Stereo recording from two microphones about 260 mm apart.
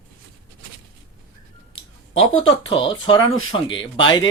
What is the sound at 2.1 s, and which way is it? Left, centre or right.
Speech, left.